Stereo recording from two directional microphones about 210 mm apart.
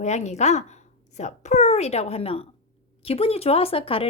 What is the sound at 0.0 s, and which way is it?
Speech, 35° left (ahead or behind).